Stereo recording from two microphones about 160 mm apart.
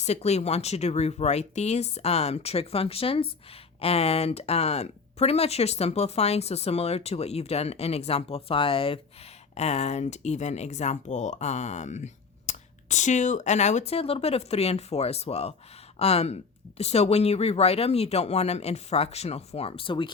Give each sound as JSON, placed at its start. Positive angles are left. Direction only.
{"t": 0.0, "sound": "speech", "side_deg": 45}